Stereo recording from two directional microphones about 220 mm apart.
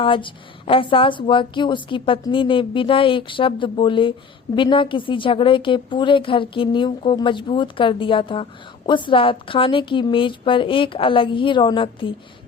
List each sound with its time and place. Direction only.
0.0 s a woman's voice: 25° left (ahead or behind)